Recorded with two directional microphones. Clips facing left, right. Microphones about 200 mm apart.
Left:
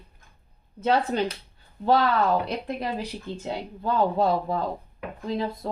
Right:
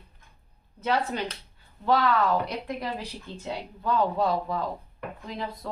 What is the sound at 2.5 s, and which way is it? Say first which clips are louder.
Speech: left 3 dB; 30° left (ahead or behind).